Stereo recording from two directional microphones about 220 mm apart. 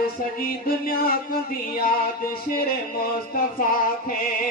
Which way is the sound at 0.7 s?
40° left (ahead or behind).